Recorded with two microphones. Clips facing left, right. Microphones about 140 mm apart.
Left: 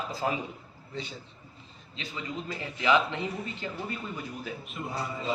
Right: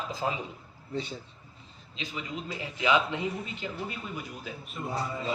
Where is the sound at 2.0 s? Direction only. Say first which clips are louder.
Even; 15° right (ahead or behind).